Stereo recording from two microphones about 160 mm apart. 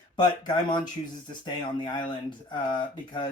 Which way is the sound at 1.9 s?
30° left (ahead or behind).